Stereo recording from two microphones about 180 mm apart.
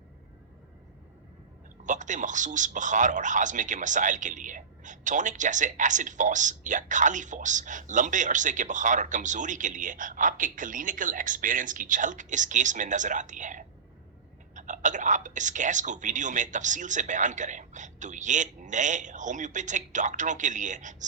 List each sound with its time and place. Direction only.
1.8 s speech: 45° right (ahead or behind)